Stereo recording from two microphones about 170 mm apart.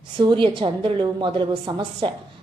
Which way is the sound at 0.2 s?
30° right (ahead or behind).